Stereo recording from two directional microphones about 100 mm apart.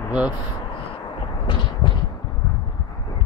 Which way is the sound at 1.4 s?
55° left (ahead or behind).